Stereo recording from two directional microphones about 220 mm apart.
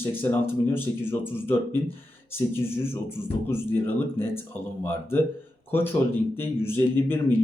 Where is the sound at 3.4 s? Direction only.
10° left (ahead or behind).